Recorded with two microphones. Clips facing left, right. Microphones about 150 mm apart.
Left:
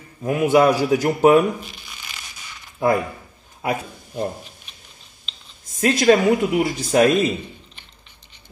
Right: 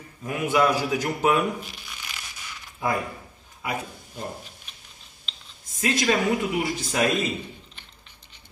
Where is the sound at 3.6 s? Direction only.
50° left (ahead or behind).